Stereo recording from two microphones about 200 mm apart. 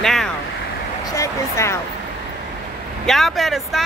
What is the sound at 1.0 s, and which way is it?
Speech, 15° left (ahead or behind).